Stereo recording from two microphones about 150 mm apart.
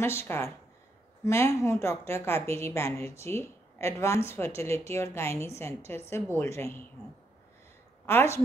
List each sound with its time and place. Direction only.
0.0 s a woman's voice: 15° left (ahead or behind)
8.1 s a woman's voice: 15° left (ahead or behind)